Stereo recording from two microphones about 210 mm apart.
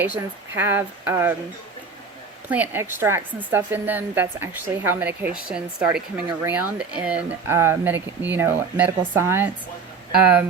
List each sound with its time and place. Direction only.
0.0 s a woman's voice: 10° right (ahead or behind)
2.5 s a woman's voice: 10° right (ahead or behind)